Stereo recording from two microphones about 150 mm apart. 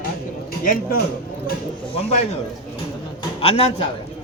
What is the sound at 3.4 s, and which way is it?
Speech, 45° left (ahead or behind).